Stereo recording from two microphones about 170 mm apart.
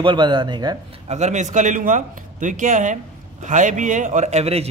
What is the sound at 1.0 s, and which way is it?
A man's voice, 40° right (ahead or behind).